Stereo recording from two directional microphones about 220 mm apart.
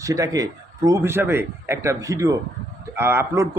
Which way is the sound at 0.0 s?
15° right (ahead or behind).